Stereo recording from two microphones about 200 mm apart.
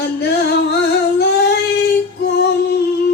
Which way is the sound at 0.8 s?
55° left (ahead or behind).